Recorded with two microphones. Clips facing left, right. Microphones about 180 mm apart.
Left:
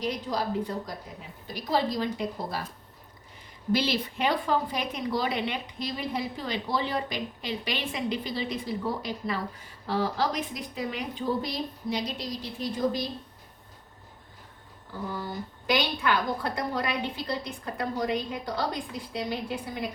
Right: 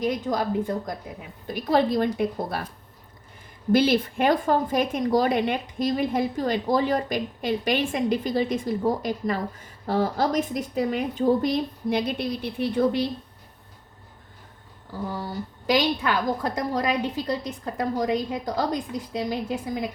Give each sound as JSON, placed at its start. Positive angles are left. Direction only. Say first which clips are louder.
{"t": 0.0, "sound": "a woman's voice", "louder": "right 5 dB", "side_deg": -50}
{"t": 3.7, "sound": "a woman's voice", "louder": "right 7 dB", "side_deg": -50}
{"t": 15.1, "sound": "a woman's voice", "louder": "right 3 dB", "side_deg": -35}